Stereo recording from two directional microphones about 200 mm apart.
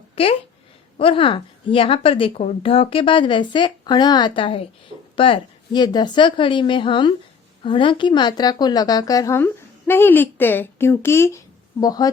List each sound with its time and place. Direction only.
0.9 s a woman's voice: 25° left (ahead or behind)